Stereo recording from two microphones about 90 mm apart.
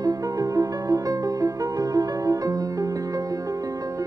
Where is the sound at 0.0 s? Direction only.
40° right (ahead or behind).